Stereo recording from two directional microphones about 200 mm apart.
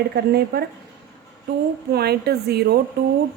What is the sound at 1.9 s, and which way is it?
A woman's voice, 50° right (ahead or behind).